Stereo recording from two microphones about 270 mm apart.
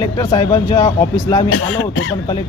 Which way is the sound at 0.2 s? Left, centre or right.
Centre.